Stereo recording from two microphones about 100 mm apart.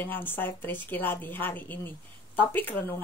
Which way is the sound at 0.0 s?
20° left (ahead or behind).